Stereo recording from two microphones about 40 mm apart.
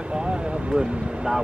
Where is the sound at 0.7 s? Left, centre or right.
Centre.